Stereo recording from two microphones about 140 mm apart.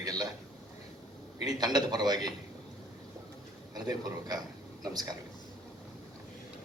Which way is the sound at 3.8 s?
30° right (ahead or behind).